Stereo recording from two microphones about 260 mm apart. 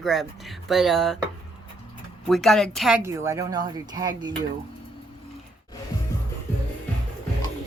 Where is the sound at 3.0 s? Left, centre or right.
Centre.